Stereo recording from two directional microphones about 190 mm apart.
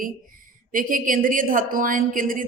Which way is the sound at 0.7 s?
45° right (ahead or behind).